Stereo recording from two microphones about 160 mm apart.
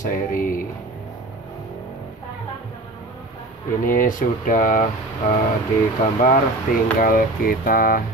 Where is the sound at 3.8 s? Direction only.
60° left (ahead or behind).